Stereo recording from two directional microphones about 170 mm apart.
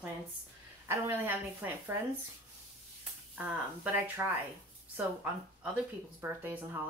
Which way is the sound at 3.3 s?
10° right (ahead or behind).